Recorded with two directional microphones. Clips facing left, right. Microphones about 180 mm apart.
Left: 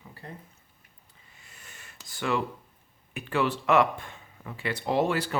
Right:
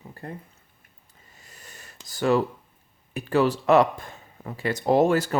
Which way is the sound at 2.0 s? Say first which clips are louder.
Right 7 dB; 40° right (ahead or behind).